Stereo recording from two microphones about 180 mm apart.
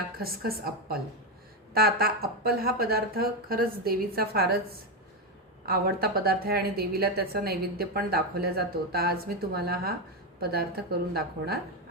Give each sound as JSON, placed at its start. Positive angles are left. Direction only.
{"t": 0.2, "sound": "a woman's voice", "side_deg": -55}